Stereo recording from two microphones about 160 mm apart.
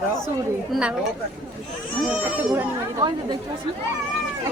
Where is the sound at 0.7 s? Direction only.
5° right (ahead or behind).